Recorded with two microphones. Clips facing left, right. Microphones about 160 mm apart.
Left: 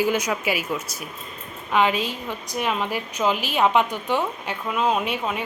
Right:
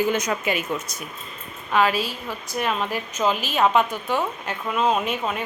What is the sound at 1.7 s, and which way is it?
A woman's voice, 20° left (ahead or behind).